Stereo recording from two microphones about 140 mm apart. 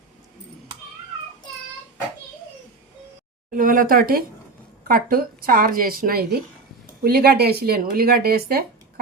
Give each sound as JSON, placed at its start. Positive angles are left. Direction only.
{"t": 3.5, "sound": "a woman's voice", "side_deg": -80}